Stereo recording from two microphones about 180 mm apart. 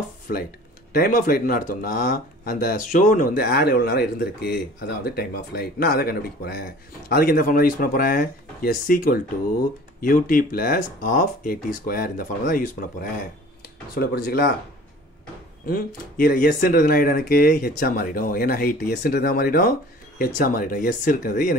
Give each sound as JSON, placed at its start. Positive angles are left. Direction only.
{"t": 0.3, "sound": "speech", "side_deg": 55}
{"t": 15.6, "sound": "speech", "side_deg": 55}